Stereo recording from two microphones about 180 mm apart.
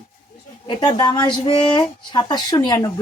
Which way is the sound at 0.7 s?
25° left (ahead or behind).